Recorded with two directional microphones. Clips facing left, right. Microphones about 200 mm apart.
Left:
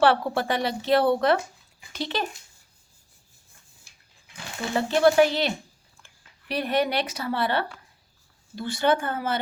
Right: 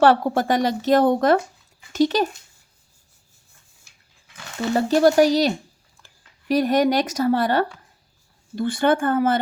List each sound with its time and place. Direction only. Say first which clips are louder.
0.0 s speech: right 4 dB; 45° right (ahead or behind)
4.7 s speech: right 4 dB; 40° right (ahead or behind)